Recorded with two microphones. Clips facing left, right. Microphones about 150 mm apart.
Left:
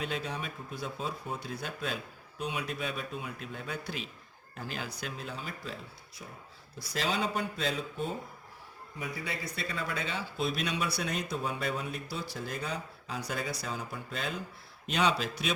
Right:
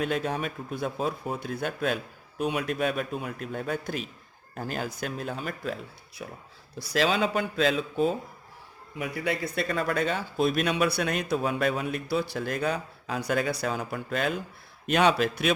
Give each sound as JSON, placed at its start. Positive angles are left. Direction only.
{"t": 0.0, "sound": "speech", "side_deg": -50}
{"t": 6.7, "sound": "speech", "side_deg": -90}
{"t": 9.0, "sound": "speech", "side_deg": -60}